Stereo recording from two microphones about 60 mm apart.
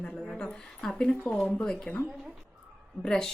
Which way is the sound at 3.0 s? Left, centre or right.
Centre.